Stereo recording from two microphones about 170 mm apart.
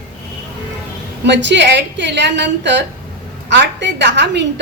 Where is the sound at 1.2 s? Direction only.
90° right.